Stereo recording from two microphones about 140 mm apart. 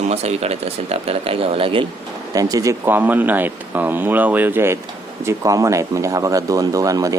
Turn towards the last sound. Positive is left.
turn(degrees=-25)  # may be behind; listen again after turning